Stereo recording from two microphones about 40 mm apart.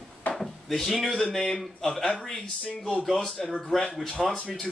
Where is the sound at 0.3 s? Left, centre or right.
Centre.